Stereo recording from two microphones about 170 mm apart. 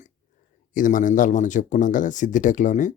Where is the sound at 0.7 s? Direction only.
50° left (ahead or behind).